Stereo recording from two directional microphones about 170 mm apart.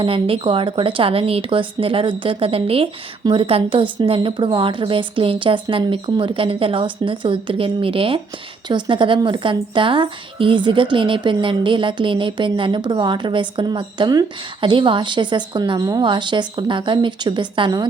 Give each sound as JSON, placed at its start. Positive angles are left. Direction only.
{"t": 0.0, "sound": "speech", "side_deg": -30}